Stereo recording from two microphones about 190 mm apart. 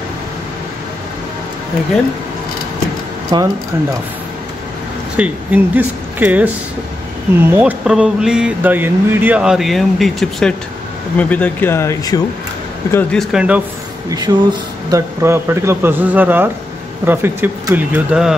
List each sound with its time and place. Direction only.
3.3 s speech: 20° right (ahead or behind)
5.1 s speech: 10° right (ahead or behind); by 12.2 s 15° left (ahead or behind)
12.9 s speech: 5° left (ahead or behind)
14.3 s a man's voice: 20° right (ahead or behind)